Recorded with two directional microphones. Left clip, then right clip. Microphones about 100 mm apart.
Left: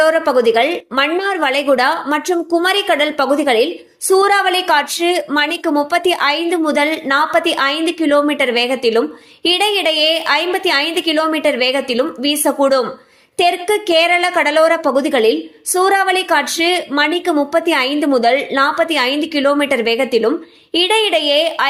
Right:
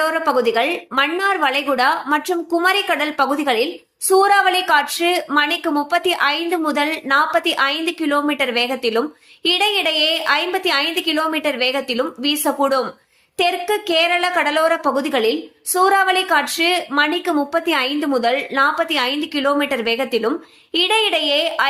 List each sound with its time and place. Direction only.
0.0 s a woman's voice: 30° left (ahead or behind)